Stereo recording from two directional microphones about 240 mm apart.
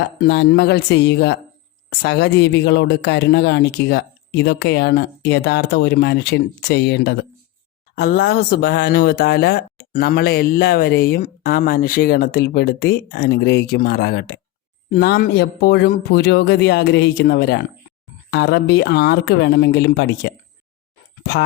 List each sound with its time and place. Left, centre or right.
0.0 s speech: left